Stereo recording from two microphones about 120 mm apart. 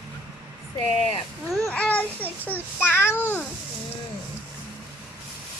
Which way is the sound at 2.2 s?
15° right (ahead or behind).